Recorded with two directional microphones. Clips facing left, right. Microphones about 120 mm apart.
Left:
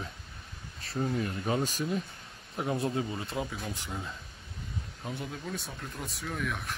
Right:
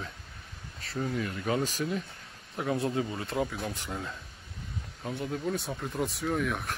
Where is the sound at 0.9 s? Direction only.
30° left (ahead or behind).